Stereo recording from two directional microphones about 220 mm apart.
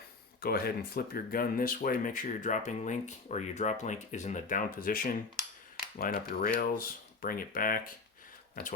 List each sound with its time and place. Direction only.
0.4 s speech: 45° left (ahead or behind)